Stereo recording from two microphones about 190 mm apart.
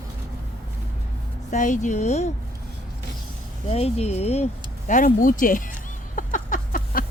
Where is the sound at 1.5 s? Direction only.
40° left (ahead or behind).